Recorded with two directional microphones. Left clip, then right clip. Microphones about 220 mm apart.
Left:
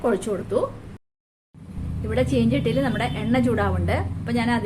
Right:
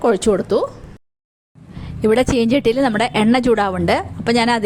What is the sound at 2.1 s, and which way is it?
A woman's voice, 50° right (ahead or behind).